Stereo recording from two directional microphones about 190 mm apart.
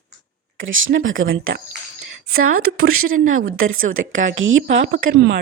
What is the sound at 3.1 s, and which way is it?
A woman's voice, 90° right.